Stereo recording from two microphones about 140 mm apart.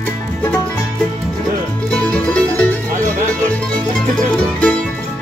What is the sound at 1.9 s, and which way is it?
Music, 5° left (ahead or behind).